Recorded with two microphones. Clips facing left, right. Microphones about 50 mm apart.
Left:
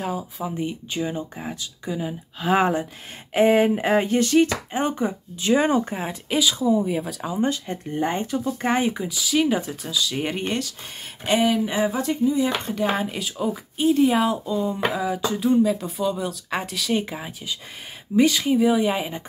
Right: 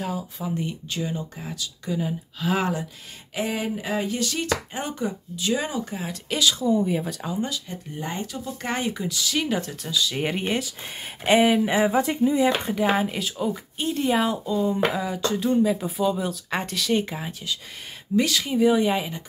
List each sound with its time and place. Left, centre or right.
0.0 s speech: centre
1.9 s speech: centre
2.4 s speech: left
6.2 s speech: centre
7.3 s speech: left
8.5 s speech: centre
11.2 s speech: right
12.7 s speech: centre
18.6 s speech: centre